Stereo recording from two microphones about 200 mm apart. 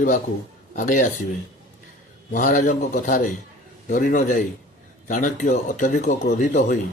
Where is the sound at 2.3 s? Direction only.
40° left (ahead or behind).